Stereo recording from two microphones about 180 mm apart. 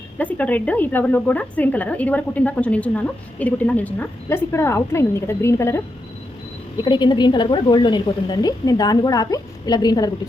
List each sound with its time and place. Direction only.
0.2 s speech: 10° left (ahead or behind)
6.8 s a woman's voice: 25° left (ahead or behind)